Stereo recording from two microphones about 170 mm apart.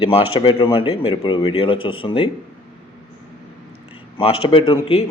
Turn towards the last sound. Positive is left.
turn(degrees=35)  # may be behind; listen again after turning